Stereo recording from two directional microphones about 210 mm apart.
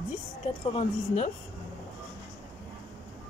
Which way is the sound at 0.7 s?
35° left (ahead or behind).